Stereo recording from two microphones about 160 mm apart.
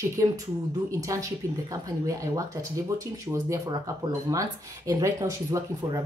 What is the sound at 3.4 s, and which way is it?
Speech, 20° right (ahead or behind).